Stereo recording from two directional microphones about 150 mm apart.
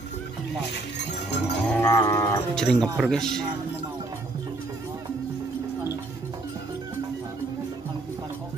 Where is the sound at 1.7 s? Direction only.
15° left (ahead or behind).